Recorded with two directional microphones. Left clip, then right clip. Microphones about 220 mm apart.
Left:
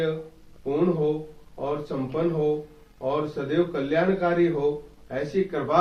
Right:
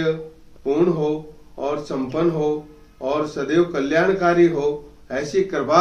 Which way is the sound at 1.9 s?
40° right (ahead or behind).